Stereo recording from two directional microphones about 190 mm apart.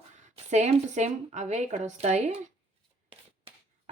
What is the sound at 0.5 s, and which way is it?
Speech, 40° right (ahead or behind).